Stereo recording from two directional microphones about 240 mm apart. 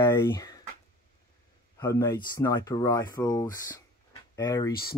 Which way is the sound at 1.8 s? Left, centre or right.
Centre.